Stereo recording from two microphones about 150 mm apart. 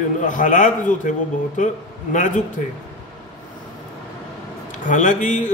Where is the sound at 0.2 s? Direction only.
55° left (ahead or behind).